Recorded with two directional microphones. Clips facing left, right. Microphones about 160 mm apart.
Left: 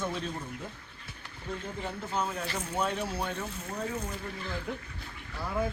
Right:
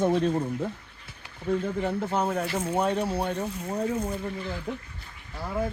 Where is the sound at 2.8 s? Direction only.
35° right (ahead or behind).